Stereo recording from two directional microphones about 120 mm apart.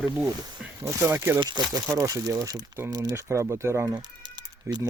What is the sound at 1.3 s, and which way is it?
Speech, 35° right (ahead or behind).